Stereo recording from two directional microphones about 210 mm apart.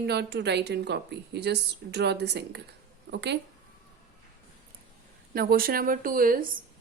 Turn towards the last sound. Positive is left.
turn(degrees=-40)  # may be behind; listen again after turning